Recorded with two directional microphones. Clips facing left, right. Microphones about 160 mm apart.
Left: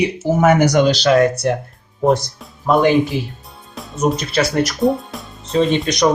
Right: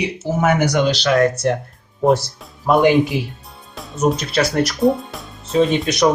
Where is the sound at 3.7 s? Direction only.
Centre (ahead or behind).